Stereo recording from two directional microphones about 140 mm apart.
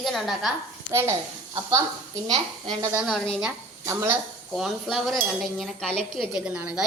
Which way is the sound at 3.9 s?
20° right (ahead or behind).